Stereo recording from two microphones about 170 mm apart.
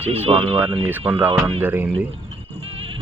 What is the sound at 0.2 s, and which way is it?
Speech, 35° right (ahead or behind).